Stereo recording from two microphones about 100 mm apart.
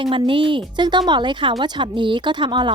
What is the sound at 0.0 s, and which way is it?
Speech, 60° right (ahead or behind).